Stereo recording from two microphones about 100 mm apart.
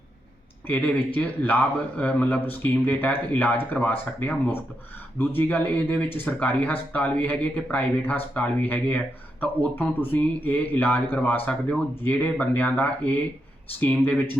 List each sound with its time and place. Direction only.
0.7 s speech: 20° left (ahead or behind)